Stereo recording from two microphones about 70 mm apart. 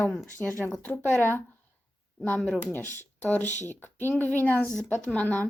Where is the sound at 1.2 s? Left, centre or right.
Left.